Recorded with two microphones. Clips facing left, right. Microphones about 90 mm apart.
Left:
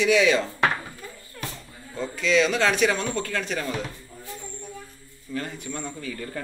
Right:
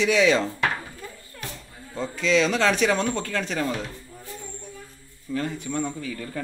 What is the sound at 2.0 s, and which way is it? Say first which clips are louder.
A man's voice: even; 35° right (ahead or behind).